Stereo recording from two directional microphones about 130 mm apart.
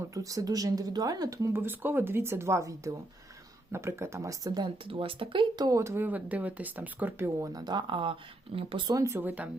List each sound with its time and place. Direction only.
0.0 s speech: 25° right (ahead or behind)
4.9 s speech: 45° right (ahead or behind)
9.0 s speech: 15° right (ahead or behind)